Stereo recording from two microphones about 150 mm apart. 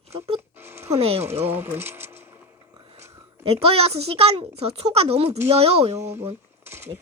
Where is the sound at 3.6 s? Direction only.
40° right (ahead or behind).